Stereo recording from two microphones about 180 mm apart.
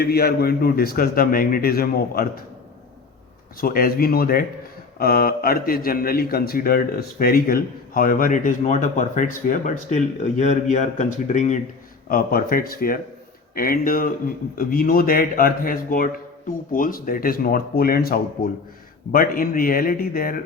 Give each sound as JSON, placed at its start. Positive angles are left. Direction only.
{"t": 0.0, "sound": "a man's voice", "side_deg": 60}
{"t": 3.6, "sound": "a man's voice", "side_deg": 55}
{"t": 12.0, "sound": "a man's voice", "side_deg": 55}